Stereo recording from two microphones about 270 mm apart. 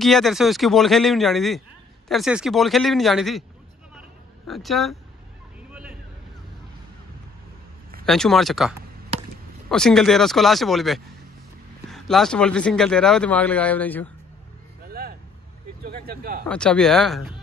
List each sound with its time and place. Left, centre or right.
0.0 s a man's voice: centre
4.5 s a man's voice: centre
8.0 s a man's voice: centre
14.9 s vehicle: right
15.8 s speech: right
16.4 s a man's voice: centre